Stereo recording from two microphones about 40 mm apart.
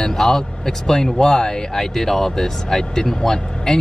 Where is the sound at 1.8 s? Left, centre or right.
Centre.